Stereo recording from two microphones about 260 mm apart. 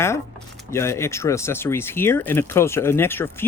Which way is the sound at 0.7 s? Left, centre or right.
Centre.